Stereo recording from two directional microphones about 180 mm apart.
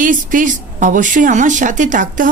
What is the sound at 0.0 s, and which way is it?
A woman's voice, 50° right (ahead or behind).